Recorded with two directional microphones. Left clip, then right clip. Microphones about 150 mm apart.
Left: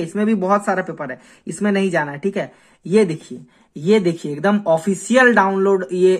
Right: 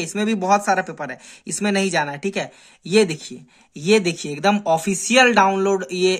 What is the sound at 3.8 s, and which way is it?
Speech, 35° right (ahead or behind).